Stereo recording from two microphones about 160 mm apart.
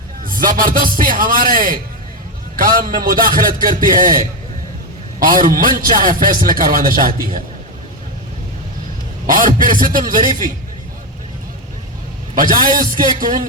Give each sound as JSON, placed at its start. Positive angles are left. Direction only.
{"t": 0.3, "sound": "a man's voice", "side_deg": -60}
{"t": 9.2, "sound": "a man's voice", "side_deg": -60}
{"t": 12.3, "sound": "a man's voice", "side_deg": -60}